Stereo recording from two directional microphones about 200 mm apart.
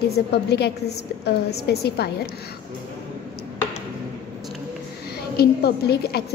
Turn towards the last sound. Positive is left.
turn(degrees=55)  # may be behind; listen again after turning